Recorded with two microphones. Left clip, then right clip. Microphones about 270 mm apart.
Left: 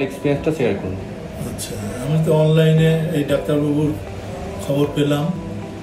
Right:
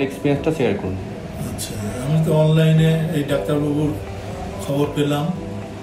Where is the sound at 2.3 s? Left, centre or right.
Right.